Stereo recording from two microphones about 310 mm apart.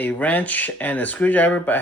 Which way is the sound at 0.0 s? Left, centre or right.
Centre.